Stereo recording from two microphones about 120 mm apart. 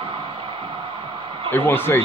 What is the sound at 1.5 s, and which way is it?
Speech, 20° left (ahead or behind).